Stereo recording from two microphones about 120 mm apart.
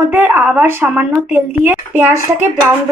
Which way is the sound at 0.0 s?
20° right (ahead or behind).